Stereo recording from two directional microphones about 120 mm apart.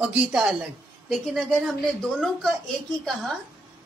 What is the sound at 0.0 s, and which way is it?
A woman's voice, 10° right (ahead or behind).